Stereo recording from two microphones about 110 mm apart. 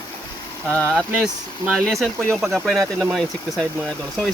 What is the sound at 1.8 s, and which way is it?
Speech, 5° left (ahead or behind).